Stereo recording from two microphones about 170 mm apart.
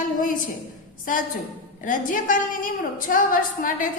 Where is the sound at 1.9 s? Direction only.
50° left (ahead or behind).